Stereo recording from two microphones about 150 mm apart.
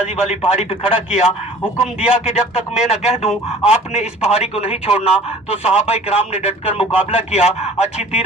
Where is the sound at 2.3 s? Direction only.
45° left (ahead or behind).